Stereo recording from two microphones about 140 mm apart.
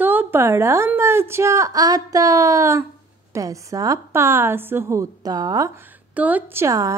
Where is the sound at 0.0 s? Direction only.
15° right (ahead or behind).